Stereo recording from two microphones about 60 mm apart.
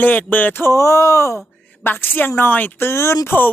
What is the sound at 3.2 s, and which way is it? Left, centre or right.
Speech, left.